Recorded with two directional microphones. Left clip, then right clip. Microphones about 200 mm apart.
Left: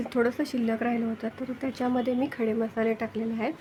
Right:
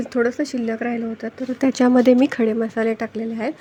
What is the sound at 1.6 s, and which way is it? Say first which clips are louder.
A child's voice: right 13 dB; 35° right (ahead or behind).